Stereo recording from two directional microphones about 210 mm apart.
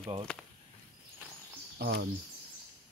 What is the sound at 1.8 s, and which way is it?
Speech, 50° right (ahead or behind).